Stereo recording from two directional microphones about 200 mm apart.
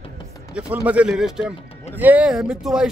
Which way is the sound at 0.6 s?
5° right (ahead or behind).